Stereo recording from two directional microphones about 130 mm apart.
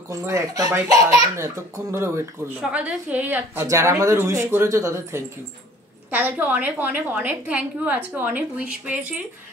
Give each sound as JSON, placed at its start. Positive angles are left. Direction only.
{"t": 0.1, "sound": "speech", "side_deg": -25}
{"t": 2.6, "sound": "a woman's voice", "side_deg": -10}
{"t": 3.6, "sound": "a woman's voice", "side_deg": -25}